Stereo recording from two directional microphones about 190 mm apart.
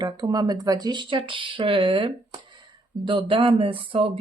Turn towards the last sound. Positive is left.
turn(degrees=-25)  # may be behind; listen again after turning